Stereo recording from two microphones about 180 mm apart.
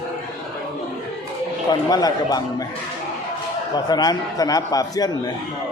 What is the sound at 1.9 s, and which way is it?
Speech, 20° left (ahead or behind).